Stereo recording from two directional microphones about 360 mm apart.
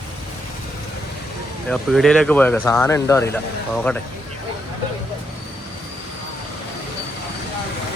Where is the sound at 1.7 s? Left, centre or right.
Centre.